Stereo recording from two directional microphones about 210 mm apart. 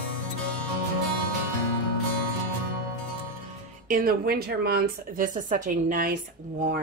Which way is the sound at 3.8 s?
45° right (ahead or behind).